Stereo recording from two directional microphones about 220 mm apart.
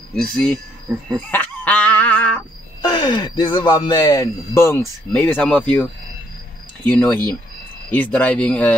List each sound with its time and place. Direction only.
0.1 s speech: 5° left (ahead or behind)
1.1 s a sound: 5° left (ahead or behind)
2.8 s speech: 20° left (ahead or behind)
6.8 s speech: 5° left (ahead or behind)